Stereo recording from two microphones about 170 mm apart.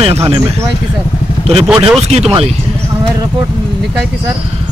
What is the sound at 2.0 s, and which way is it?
Speech, 40° right (ahead or behind).